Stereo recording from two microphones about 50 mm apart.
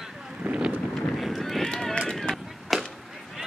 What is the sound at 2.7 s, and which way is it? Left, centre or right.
Chop, centre.